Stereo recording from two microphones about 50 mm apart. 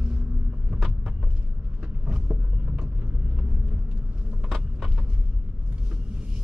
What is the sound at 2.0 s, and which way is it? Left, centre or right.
Vehicle, right.